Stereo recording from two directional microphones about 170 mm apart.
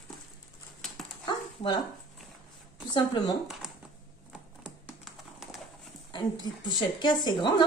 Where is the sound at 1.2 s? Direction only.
25° left (ahead or behind).